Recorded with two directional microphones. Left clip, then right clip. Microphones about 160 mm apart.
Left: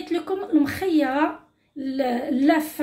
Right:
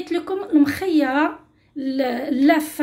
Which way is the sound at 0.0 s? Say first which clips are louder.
Right 2 dB; 25° right (ahead or behind).